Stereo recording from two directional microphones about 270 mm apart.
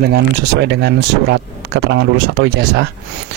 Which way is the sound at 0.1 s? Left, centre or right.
Right.